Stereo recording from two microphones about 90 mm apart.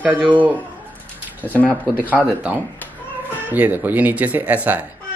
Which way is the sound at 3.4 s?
20° right (ahead or behind).